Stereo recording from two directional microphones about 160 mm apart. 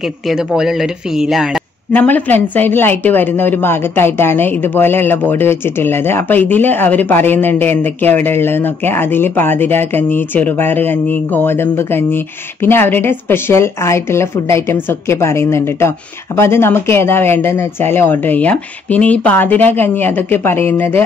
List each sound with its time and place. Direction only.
0.3 s speech: centre (ahead or behind)
1.9 s speech: 10° left (ahead or behind)